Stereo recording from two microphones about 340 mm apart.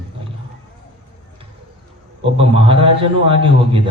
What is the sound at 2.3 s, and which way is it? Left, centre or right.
A man's voice, centre.